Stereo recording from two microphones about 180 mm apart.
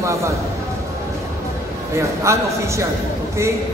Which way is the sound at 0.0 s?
15° right (ahead or behind).